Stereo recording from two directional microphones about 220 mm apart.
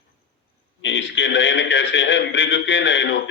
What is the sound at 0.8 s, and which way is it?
A man's voice, 55° left (ahead or behind).